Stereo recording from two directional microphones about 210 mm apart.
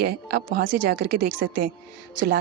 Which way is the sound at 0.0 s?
50° right (ahead or behind).